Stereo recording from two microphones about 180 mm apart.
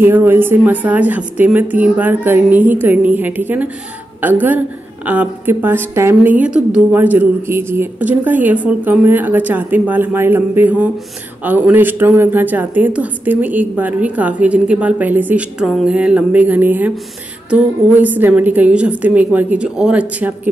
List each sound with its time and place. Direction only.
0.0 s a woman's voice: 10° right (ahead or behind)